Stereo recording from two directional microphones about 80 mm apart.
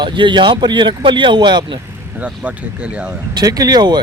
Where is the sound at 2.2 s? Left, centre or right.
Centre.